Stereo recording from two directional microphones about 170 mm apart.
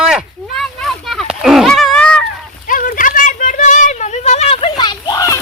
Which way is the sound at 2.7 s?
55° left (ahead or behind).